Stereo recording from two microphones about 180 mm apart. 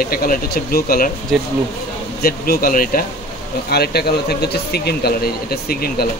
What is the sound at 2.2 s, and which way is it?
Speech, 55° left (ahead or behind).